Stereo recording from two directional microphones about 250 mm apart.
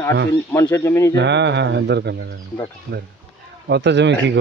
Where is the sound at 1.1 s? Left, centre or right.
Right.